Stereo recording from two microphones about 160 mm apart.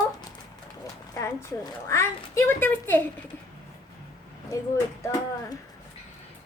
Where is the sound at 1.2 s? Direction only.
20° left (ahead or behind).